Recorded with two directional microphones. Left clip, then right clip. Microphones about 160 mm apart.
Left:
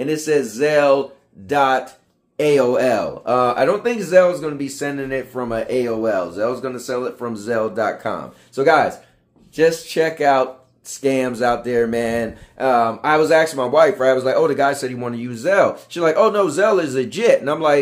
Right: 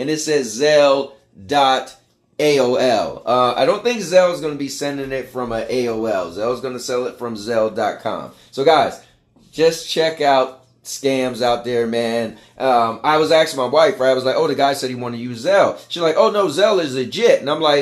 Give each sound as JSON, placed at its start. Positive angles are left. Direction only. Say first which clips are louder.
{"t": 0.0, "sound": "speech", "louder": "even", "side_deg": 10}